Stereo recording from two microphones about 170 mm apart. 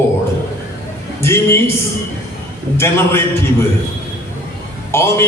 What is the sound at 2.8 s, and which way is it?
Speech, 15° left (ahead or behind).